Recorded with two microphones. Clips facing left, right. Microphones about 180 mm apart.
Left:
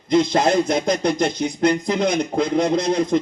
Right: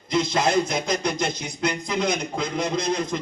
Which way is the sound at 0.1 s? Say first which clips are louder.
Left 5 dB; 55° left (ahead or behind).